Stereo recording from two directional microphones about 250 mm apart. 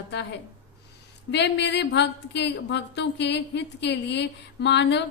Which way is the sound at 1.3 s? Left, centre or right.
Left.